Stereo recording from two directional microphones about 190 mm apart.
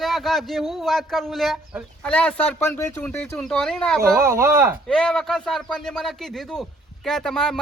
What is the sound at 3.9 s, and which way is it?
Speech, 15° right (ahead or behind).